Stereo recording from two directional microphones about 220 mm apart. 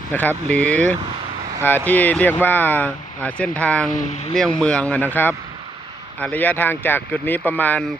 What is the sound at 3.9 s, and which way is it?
Speech, 30° left (ahead or behind).